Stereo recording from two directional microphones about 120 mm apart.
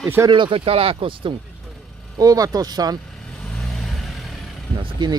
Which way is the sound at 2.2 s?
30° right (ahead or behind).